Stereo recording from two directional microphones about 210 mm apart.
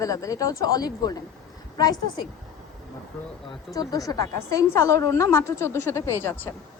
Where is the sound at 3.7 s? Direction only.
15° left (ahead or behind).